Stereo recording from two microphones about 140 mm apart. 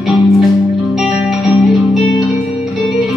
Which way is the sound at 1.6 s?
Centre (ahead or behind).